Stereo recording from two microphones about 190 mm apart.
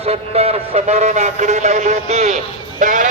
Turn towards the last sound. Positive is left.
turn(degrees=-45)  # may be behind; listen again after turning